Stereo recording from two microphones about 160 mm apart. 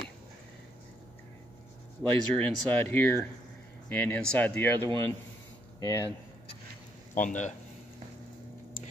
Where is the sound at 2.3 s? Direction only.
10° left (ahead or behind).